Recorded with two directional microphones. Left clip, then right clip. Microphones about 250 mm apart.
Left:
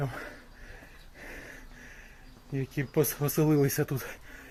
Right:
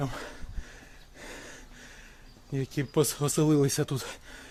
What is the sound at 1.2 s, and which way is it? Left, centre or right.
Gasp, right.